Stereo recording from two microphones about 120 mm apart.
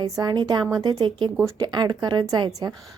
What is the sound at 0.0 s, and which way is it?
A woman's voice, 35° right (ahead or behind).